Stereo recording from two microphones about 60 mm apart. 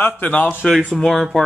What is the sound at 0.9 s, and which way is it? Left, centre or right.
Speech, centre.